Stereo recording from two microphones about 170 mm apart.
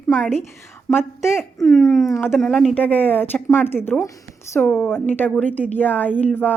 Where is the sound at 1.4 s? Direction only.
Centre (ahead or behind).